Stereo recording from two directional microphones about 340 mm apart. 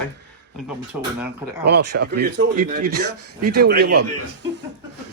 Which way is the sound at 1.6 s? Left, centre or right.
Right.